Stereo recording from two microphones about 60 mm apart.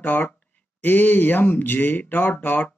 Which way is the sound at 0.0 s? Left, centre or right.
Left.